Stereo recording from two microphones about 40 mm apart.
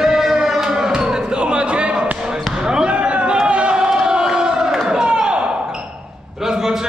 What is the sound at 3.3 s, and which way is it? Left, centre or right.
Crowd, right.